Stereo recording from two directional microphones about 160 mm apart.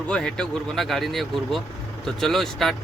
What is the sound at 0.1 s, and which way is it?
Speech, 5° left (ahead or behind).